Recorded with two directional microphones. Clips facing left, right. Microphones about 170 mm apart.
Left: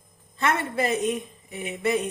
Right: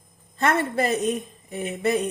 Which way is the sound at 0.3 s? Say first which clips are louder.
Right 3 dB; 40° right (ahead or behind).